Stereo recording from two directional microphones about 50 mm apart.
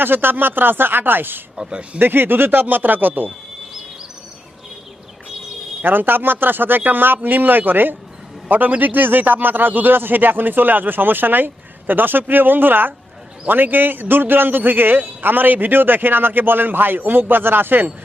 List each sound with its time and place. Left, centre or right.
0.0 s a man's voice: right
1.5 s speech: centre
2.0 s a man's voice: right
5.8 s a man's voice: right